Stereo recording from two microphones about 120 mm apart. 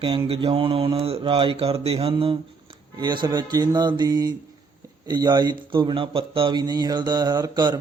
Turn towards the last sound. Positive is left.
turn(degrees=-35)  # may be behind; listen again after turning